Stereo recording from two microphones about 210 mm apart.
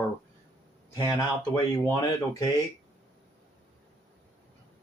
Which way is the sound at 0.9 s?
20° left (ahead or behind).